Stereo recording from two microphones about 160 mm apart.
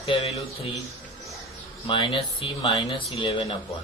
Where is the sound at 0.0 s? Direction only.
40° left (ahead or behind).